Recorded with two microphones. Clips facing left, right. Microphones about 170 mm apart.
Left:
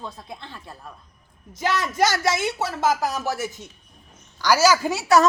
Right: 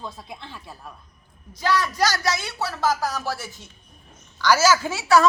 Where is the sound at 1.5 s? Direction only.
20° left (ahead or behind).